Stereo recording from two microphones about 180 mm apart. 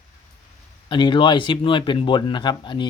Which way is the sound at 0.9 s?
25° left (ahead or behind).